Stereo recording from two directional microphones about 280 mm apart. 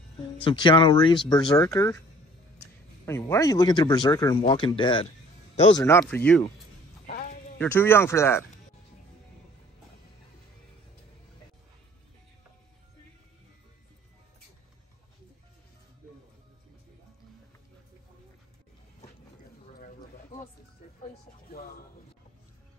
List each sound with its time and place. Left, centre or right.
0.2 s speech: centre
3.1 s speech: centre
7.1 s a sound: left
7.5 s speech: centre
21.5 s music: left